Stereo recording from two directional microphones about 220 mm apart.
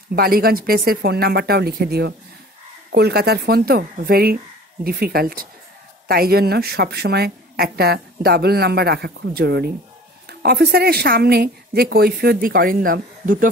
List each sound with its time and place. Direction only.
0.1 s a woman's voice: 45° right (ahead or behind)